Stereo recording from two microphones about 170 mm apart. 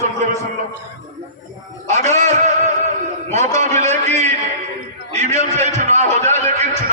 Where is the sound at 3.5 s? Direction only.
40° right (ahead or behind).